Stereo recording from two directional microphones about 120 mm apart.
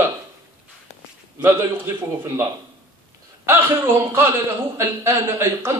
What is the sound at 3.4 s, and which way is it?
Speech, 20° right (ahead or behind).